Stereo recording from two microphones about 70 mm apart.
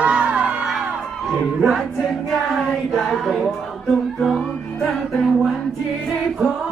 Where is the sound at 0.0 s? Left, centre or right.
Centre.